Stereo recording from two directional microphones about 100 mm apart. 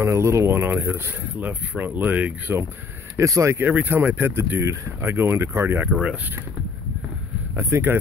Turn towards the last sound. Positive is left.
turn(degrees=-25)  # may be behind; listen again after turning